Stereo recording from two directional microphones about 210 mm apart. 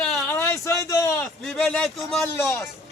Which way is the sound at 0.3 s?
15° left (ahead or behind).